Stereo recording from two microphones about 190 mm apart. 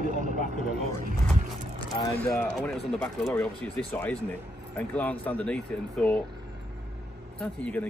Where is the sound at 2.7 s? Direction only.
Centre (ahead or behind).